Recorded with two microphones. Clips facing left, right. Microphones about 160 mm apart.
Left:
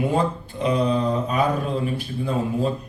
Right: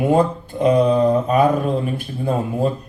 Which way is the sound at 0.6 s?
50° right (ahead or behind).